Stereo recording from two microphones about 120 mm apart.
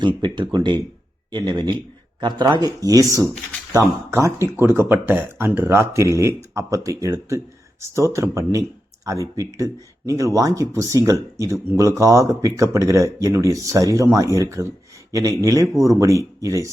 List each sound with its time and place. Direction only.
0.0 s speech: 40° right (ahead or behind)